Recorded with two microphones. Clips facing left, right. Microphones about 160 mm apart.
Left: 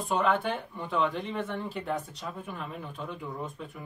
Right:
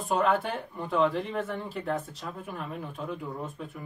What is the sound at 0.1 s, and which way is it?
Speech, 5° right (ahead or behind).